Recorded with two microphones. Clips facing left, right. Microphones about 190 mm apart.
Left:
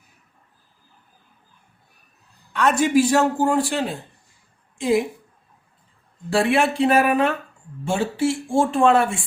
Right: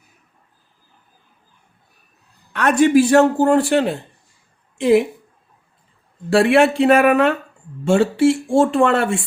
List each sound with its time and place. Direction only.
2.5 s a man's voice: 60° right (ahead or behind)
6.3 s speech: 65° right (ahead or behind)